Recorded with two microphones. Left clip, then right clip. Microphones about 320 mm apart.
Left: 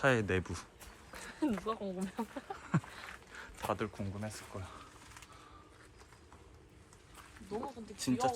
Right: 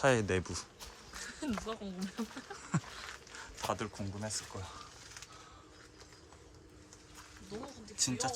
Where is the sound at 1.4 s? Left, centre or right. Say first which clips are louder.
Left 5 dB; centre.